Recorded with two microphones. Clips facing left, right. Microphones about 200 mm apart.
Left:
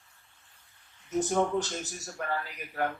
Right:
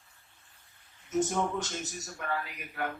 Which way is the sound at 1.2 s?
35° left (ahead or behind).